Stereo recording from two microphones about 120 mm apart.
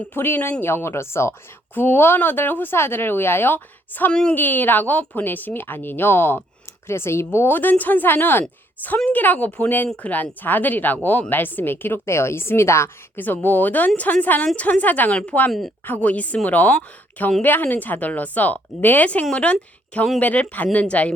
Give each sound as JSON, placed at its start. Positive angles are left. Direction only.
{"t": 0.0, "sound": "speech", "side_deg": 15}